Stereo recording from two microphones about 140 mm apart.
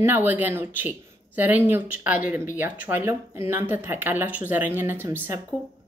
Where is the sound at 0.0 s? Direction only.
15° right (ahead or behind).